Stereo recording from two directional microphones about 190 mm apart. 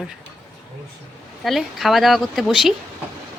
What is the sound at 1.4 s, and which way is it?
Speech, centre (ahead or behind).